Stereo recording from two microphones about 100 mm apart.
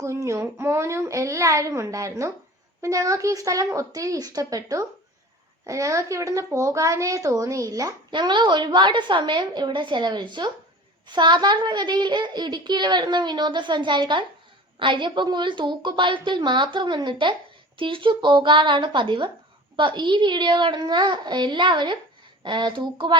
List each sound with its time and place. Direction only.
0.0 s a woman's voice: 30° right (ahead or behind)
8.1 s a child's voice: 50° right (ahead or behind)